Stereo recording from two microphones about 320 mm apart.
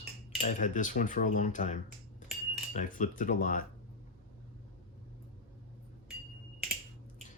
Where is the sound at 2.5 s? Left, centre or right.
Left.